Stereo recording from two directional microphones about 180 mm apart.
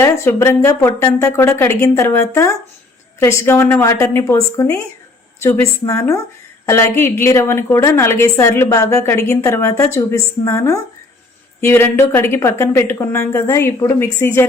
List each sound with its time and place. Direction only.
0.0 s a woman's voice: 15° left (ahead or behind)